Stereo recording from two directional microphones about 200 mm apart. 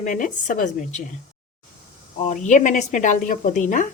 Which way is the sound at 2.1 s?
35° left (ahead or behind).